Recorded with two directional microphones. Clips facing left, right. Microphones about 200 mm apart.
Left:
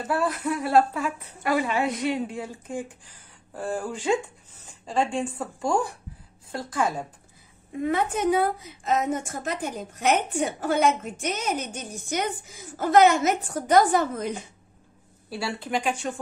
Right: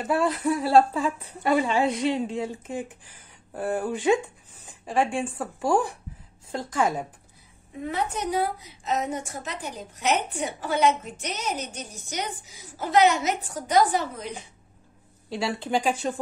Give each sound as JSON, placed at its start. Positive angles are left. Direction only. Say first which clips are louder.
{"t": 0.0, "sound": "a woman's voice", "louder": "right 2 dB", "side_deg": -25}
{"t": 7.9, "sound": "a woman's voice", "louder": "left 4 dB", "side_deg": 55}
{"t": 15.3, "sound": "a woman's voice", "louder": "right 2 dB", "side_deg": -25}